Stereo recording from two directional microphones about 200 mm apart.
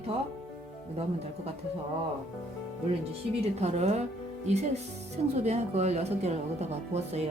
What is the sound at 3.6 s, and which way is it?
Speech, 35° right (ahead or behind).